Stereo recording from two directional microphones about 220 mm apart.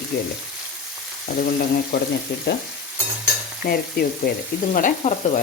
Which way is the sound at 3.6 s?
45° left (ahead or behind).